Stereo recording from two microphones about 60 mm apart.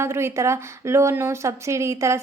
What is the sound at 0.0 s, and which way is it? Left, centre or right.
A woman's voice, right.